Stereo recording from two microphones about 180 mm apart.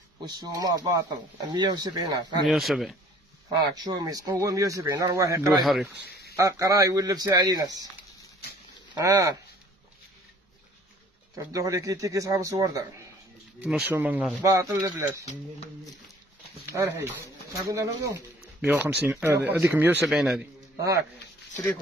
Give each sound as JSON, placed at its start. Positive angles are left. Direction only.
{"t": 0.2, "sound": "speech", "side_deg": -20}
{"t": 2.4, "sound": "speech", "side_deg": 0}
{"t": 3.7, "sound": "speech", "side_deg": -20}
{"t": 8.9, "sound": "speech", "side_deg": -20}
{"t": 11.3, "sound": "speech", "side_deg": -20}
{"t": 13.6, "sound": "speech", "side_deg": -5}
{"t": 16.7, "sound": "speech", "side_deg": -15}